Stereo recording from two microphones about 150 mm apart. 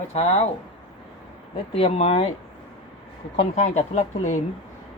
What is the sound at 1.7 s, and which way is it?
Speech, 40° left (ahead or behind).